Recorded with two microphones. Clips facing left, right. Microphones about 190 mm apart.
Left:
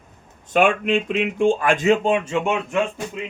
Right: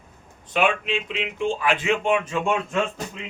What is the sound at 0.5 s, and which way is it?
Speech, 50° left (ahead or behind).